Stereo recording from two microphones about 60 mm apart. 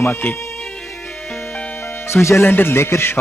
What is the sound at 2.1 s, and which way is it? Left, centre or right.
Speech, left.